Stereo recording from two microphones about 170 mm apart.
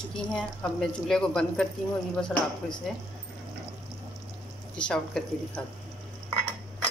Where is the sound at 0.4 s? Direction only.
5° left (ahead or behind).